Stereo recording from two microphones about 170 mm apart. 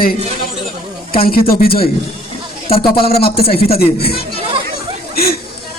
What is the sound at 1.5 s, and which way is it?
Speech, 60° left (ahead or behind).